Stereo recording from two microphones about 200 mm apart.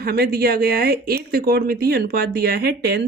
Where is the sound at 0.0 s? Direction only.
50° right (ahead or behind).